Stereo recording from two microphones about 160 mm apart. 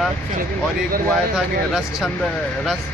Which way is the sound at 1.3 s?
Centre (ahead or behind).